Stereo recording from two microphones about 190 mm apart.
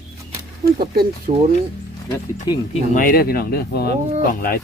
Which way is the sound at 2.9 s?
50° left (ahead or behind).